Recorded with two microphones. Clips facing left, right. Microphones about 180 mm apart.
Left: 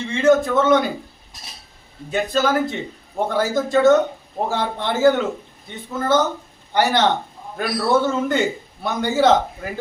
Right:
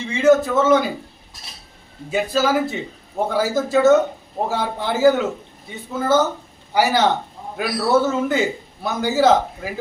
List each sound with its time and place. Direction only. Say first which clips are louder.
0.0 s a man's voice: right 1 dB; 5° right (ahead or behind)
2.0 s a man's voice: even; 5° right (ahead or behind)